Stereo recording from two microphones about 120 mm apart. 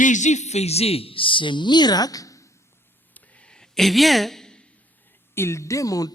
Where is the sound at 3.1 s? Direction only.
10° left (ahead or behind).